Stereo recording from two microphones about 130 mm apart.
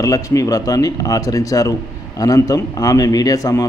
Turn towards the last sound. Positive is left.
turn(degrees=25)  # may be behind; listen again after turning